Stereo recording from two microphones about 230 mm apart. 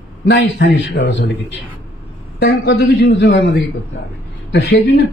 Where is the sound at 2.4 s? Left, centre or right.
Left.